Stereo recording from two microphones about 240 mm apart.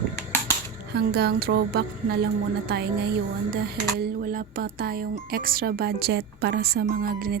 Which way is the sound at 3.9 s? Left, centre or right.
Right.